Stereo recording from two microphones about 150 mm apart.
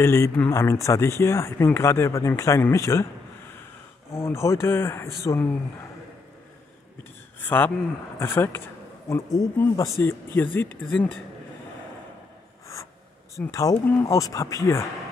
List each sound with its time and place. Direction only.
0.0 s speech: 15° left (ahead or behind)
4.1 s speech: 20° left (ahead or behind)
7.3 s speech: 15° left (ahead or behind)
13.5 s speech: 20° left (ahead or behind)
13.7 s speech: 10° left (ahead or behind)
14.0 s speech: 20° left (ahead or behind)